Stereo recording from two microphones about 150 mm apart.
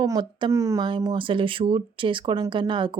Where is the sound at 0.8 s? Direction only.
30° right (ahead or behind).